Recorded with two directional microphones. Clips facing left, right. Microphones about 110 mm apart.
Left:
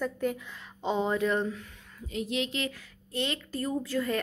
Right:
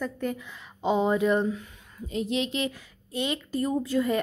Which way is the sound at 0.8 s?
10° right (ahead or behind).